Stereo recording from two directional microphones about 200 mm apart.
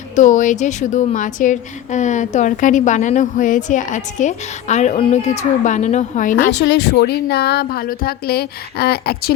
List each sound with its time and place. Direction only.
0.2 s a woman's voice: 40° left (ahead or behind)